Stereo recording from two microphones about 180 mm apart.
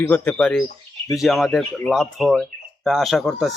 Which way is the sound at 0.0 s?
10° left (ahead or behind).